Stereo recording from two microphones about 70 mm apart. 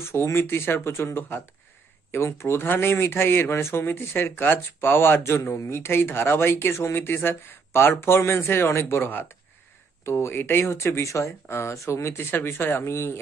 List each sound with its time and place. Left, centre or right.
0.0 s speech: left